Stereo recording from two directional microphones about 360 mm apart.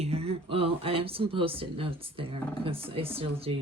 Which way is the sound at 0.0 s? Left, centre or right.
Centre.